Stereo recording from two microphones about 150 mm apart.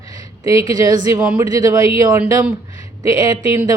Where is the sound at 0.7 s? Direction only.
25° right (ahead or behind).